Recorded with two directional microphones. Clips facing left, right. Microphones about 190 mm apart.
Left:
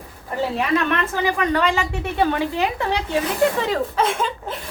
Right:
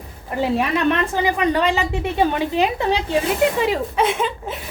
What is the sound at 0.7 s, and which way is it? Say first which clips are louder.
A woman's voice: right 1 dB; 20° right (ahead or behind).